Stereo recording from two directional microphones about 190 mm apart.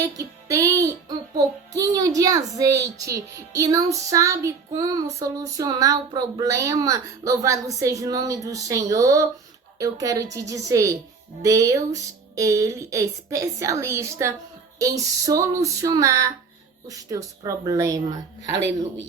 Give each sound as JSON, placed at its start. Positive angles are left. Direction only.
{"t": 0.2, "sound": "speech", "side_deg": -15}